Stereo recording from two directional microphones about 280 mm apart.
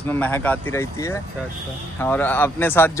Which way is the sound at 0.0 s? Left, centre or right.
Centre.